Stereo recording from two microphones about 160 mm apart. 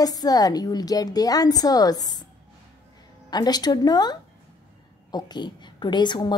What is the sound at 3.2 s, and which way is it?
A woman's voice, 25° left (ahead or behind).